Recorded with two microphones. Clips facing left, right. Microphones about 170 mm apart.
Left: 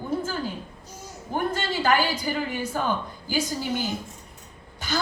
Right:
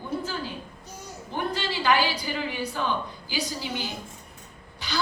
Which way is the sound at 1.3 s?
45° left (ahead or behind).